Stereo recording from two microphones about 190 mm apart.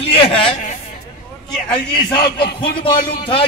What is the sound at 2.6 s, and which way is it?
Speech, 25° left (ahead or behind).